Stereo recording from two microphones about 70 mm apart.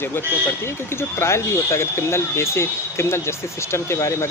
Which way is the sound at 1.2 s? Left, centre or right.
Left.